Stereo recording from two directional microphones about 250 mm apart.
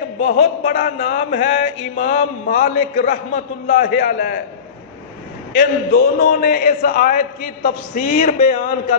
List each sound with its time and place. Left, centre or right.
0.2 s a man's voice: left
5.6 s a man's voice: left